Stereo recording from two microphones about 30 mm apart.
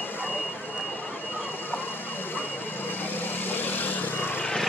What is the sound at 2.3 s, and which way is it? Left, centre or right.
Vehicle, left.